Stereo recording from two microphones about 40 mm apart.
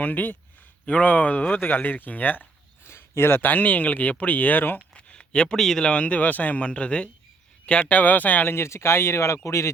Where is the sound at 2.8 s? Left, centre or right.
Left.